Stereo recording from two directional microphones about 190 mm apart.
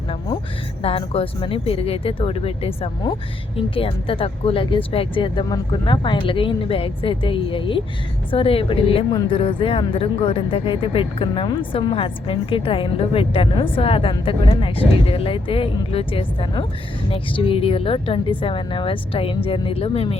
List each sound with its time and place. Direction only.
0.8 s a woman's voice: 30° left (ahead or behind)